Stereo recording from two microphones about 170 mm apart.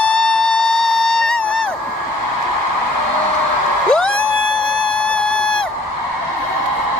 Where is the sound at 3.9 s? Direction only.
5° left (ahead or behind).